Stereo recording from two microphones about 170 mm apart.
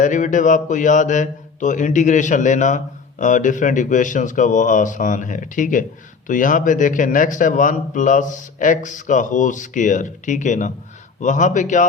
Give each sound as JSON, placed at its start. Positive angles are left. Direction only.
{"t": 0.0, "sound": "a man's voice", "side_deg": 50}